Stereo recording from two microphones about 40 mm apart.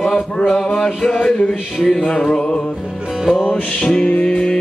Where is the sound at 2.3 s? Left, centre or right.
Left.